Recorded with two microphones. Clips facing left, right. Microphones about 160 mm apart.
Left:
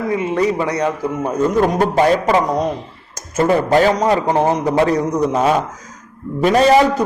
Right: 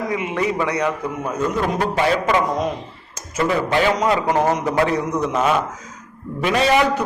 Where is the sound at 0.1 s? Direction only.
30° left (ahead or behind).